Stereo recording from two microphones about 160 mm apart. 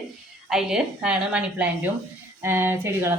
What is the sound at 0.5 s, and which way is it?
A woman's voice, 5° right (ahead or behind).